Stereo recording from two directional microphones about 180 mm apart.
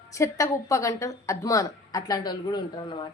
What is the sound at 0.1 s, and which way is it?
Speech, 15° left (ahead or behind).